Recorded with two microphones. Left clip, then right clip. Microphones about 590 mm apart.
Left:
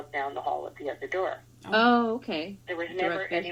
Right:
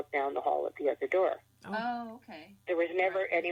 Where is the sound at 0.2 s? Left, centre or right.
Right.